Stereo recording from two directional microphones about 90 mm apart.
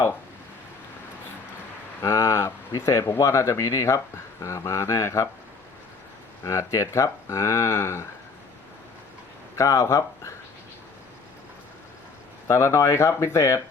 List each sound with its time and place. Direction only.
2.0 s speech: 30° left (ahead or behind)
6.4 s speech: 35° left (ahead or behind)
9.6 s speech: 35° left (ahead or behind)
12.5 s speech: 35° left (ahead or behind)